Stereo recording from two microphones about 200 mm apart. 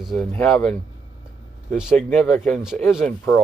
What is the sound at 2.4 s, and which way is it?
Speech, centre (ahead or behind).